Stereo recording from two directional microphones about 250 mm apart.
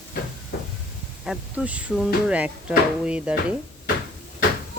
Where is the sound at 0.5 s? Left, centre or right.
Left.